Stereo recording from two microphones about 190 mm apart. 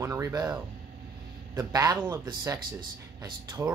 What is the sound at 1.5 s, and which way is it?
Speech, 15° right (ahead or behind).